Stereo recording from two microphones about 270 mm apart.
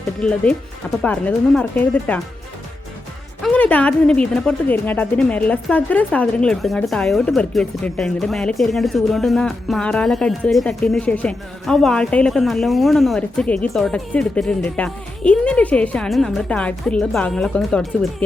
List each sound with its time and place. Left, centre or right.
0.2 s speech: centre
3.4 s speech: centre